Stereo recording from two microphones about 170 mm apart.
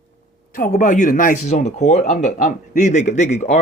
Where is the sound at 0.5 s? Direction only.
50° left (ahead or behind).